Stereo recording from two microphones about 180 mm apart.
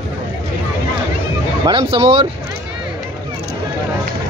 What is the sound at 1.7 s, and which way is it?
Speech, 30° right (ahead or behind).